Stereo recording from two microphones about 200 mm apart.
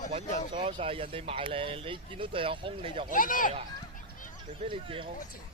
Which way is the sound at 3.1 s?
40° left (ahead or behind).